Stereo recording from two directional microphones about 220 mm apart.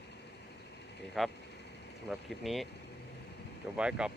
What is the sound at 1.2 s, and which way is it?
Speech, centre (ahead or behind).